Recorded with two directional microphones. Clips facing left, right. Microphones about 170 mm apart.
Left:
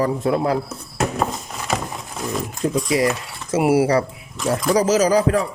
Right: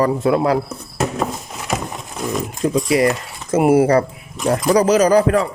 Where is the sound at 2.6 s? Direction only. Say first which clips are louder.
Right 3 dB; 80° right.